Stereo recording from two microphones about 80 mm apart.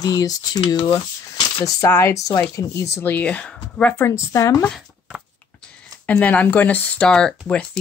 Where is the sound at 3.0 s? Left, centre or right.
Centre.